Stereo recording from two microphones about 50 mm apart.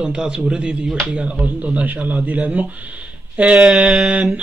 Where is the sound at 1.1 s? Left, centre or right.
Right.